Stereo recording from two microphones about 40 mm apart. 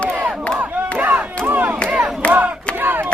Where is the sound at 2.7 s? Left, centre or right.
Right.